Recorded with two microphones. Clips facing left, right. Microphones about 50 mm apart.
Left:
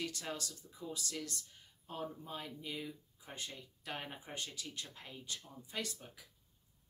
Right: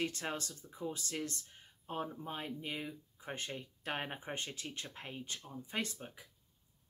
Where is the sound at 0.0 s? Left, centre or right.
Right.